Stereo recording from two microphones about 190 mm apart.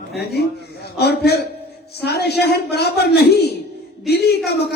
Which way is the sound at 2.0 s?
60° left (ahead or behind).